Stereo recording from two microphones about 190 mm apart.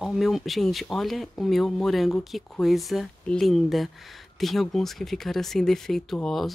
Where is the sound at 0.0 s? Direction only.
Centre (ahead or behind).